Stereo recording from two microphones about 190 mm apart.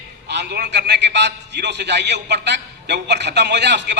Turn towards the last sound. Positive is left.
turn(degrees=-65)  # may be behind; listen again after turning